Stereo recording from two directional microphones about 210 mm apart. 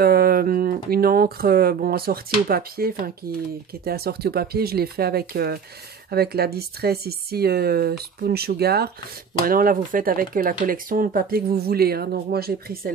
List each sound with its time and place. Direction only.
0.0 s speech: 45° right (ahead or behind)